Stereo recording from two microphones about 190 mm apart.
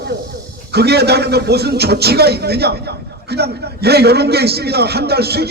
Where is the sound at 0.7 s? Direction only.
60° right (ahead or behind).